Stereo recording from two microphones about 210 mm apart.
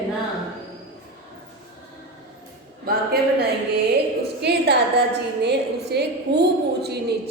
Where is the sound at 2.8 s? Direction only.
50° right (ahead or behind).